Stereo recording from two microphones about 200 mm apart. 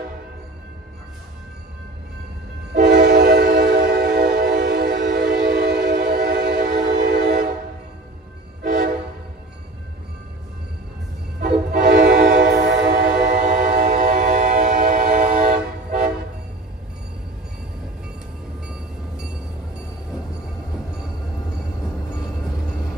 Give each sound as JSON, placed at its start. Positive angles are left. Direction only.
{"t": 2.7, "sound": "train", "side_deg": -55}
{"t": 8.6, "sound": "train", "side_deg": -55}
{"t": 11.8, "sound": "train", "side_deg": -55}
{"t": 13.4, "sound": "train", "side_deg": -35}